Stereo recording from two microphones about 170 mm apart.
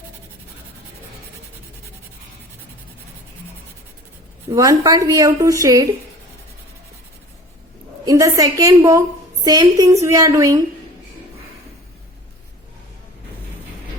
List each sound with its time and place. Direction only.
4.5 s a woman's voice: 20° right (ahead or behind)
8.0 s a woman's voice: 20° right (ahead or behind)